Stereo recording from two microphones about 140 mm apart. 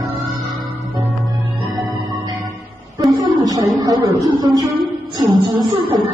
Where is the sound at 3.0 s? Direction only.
25° right (ahead or behind).